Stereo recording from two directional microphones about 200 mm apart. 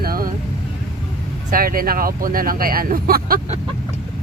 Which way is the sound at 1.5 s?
45° right (ahead or behind).